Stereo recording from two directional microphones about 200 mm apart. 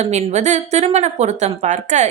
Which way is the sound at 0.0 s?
35° right (ahead or behind).